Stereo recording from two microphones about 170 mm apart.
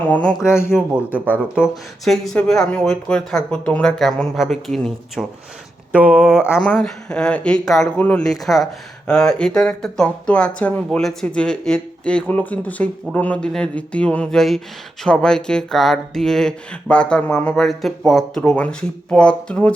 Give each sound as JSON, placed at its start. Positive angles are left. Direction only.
{"t": 0.1, "sound": "speech", "side_deg": 5}
{"t": 0.4, "sound": "speech", "side_deg": 15}
{"t": 0.7, "sound": "speech", "side_deg": -10}
{"t": 6.4, "sound": "speech", "side_deg": 10}